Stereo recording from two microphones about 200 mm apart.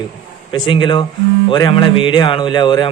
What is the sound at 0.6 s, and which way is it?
Speech, 25° left (ahead or behind).